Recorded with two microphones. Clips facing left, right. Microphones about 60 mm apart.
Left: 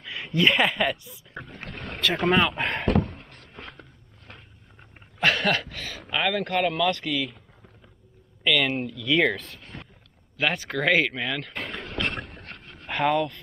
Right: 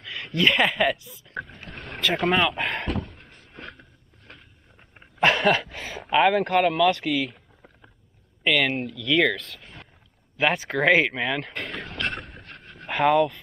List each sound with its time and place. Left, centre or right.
0.0 s a woman's voice: centre
2.9 s a sound: left
5.2 s speech: centre
8.5 s speech: centre
11.5 s vehicle: centre
12.1 s a sound: left
12.8 s speech: centre